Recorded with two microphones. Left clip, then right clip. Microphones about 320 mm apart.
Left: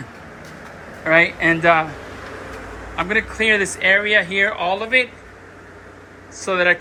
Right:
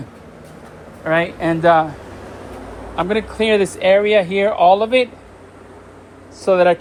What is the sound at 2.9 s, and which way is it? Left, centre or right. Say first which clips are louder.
Speech: right 1 dB; centre.